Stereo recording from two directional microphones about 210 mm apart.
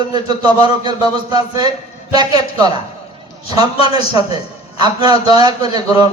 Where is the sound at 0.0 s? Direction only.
20° right (ahead or behind).